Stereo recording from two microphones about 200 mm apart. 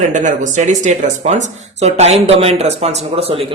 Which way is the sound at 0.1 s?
40° right (ahead or behind).